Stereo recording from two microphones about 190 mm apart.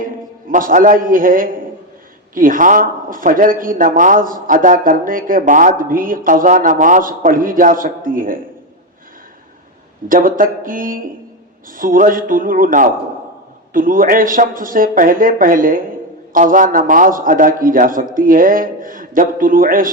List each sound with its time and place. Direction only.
0.5 s a man's voice: 45° right (ahead or behind)
10.1 s a man's voice: 45° right (ahead or behind)